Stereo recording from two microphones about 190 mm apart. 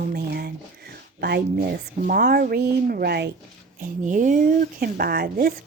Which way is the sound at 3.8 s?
40° right (ahead or behind).